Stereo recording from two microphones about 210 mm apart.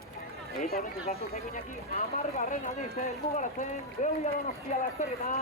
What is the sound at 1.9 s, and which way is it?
Speech, 30° left (ahead or behind).